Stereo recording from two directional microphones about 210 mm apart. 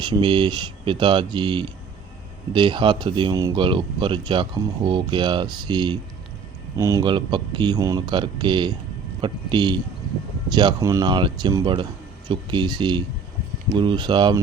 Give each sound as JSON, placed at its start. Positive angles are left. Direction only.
{"t": 0.0, "sound": "speech", "side_deg": -20}